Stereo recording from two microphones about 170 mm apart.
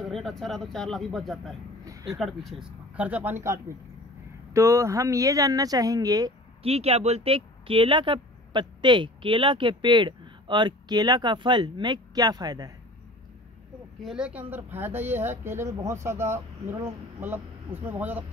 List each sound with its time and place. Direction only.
0.0 s speech: centre (ahead or behind)
1.9 s a sound: 20° right (ahead or behind)
2.1 s speech: centre (ahead or behind); by 6.3 s 20° right (ahead or behind)
6.6 s speech: 35° right (ahead or behind)
14.0 s speech: 5° right (ahead or behind)